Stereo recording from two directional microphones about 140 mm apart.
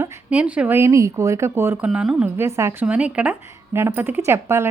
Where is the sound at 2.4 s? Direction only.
20° right (ahead or behind).